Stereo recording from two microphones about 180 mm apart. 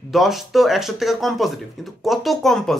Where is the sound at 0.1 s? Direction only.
Centre (ahead or behind).